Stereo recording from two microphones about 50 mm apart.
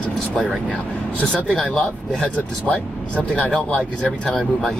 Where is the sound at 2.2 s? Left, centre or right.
Left.